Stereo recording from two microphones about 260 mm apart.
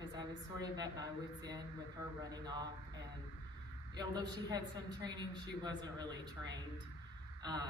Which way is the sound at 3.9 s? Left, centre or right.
Centre.